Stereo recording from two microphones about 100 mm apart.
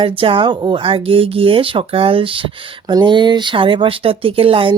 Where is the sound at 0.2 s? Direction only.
60° right (ahead or behind).